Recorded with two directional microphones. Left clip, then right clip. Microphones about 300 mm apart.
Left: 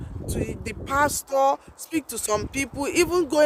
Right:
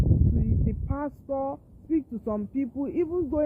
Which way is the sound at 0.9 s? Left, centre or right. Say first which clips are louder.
Left 11 dB; left.